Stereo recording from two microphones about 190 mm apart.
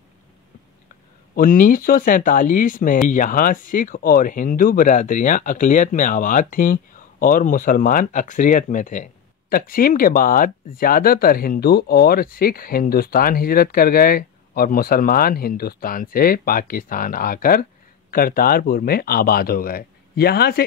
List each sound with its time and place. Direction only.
1.3 s speech: 45° left (ahead or behind)